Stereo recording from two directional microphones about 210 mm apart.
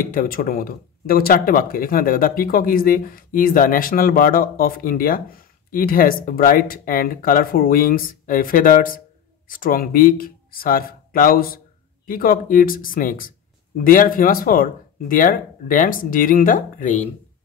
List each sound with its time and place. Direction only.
0.0 s speech: 40° left (ahead or behind)